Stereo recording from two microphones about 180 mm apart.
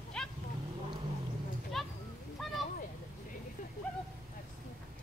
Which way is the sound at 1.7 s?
Centre (ahead or behind).